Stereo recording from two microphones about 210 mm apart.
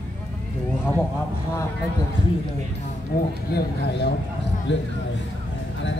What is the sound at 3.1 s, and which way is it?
A man's voice, 45° left (ahead or behind).